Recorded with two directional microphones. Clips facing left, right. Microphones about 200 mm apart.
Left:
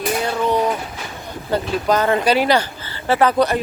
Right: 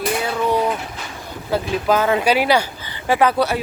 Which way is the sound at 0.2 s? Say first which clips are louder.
Left 2 dB; 5° right (ahead or behind).